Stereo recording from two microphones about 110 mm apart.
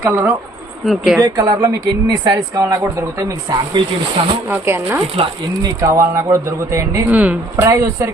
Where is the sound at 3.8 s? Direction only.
40° right (ahead or behind).